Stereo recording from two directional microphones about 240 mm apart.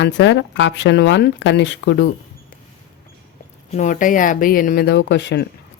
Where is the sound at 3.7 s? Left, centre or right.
Left.